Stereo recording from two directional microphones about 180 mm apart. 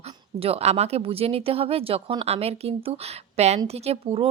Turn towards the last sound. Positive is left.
turn(degrees=-30)  # may be behind; listen again after turning